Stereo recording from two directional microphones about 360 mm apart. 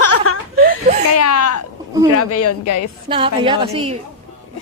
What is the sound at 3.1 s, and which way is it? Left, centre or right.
Speech, centre.